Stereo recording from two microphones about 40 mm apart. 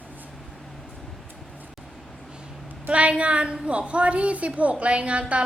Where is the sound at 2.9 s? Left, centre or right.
Right.